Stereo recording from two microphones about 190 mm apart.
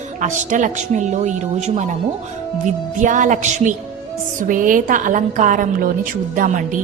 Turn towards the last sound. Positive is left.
turn(degrees=-45)  # may be behind; listen again after turning